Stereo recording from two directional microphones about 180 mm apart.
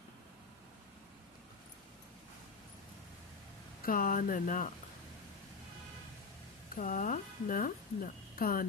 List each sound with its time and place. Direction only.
3.8 s speech: 50° left (ahead or behind)
6.7 s a woman's voice: 45° left (ahead or behind)